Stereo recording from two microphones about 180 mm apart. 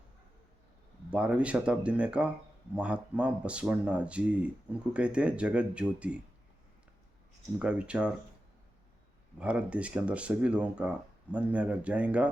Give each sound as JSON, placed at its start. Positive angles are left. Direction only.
{"t": 1.1, "sound": "speech", "side_deg": -5}
{"t": 7.6, "sound": "speech", "side_deg": -5}
{"t": 9.4, "sound": "speech", "side_deg": -5}